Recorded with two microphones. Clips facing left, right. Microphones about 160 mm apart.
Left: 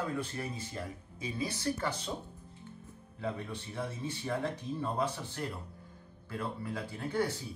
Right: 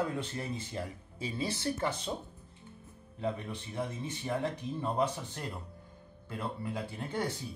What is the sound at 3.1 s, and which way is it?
Speech, 15° right (ahead or behind).